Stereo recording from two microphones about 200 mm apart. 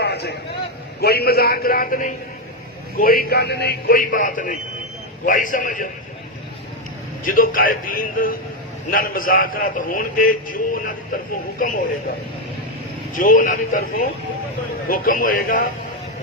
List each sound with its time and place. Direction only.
0.0 s a sound: 55° left (ahead or behind)
1.0 s a man's voice: 50° left (ahead or behind)
7.3 s a man's voice: 45° left (ahead or behind)
13.1 s a man's voice: 40° left (ahead or behind)